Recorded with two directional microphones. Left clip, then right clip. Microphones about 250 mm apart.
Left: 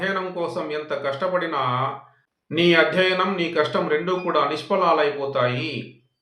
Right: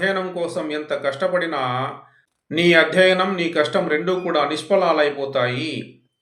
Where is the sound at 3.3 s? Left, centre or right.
Left.